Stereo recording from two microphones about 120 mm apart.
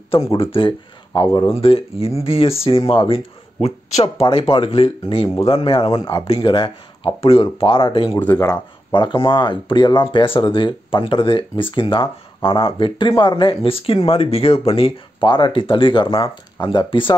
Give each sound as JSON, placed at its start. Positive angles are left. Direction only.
{"t": 0.3, "sound": "speech", "side_deg": 50}
{"t": 1.5, "sound": "speech", "side_deg": 50}
{"t": 5.9, "sound": "speech", "side_deg": 35}
{"t": 6.2, "sound": "speech", "side_deg": 45}
{"t": 8.3, "sound": "speech", "side_deg": 35}